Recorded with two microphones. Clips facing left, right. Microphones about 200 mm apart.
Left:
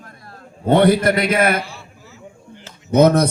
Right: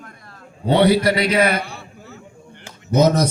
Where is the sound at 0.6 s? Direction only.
50° left (ahead or behind).